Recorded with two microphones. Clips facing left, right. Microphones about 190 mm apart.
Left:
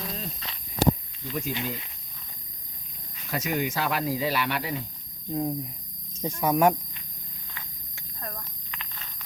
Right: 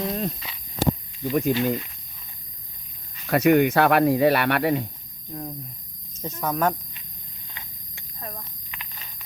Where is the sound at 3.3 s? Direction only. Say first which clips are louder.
Right 11 dB; 60° right (ahead or behind).